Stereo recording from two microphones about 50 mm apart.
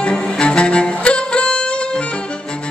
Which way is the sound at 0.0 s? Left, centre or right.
Centre.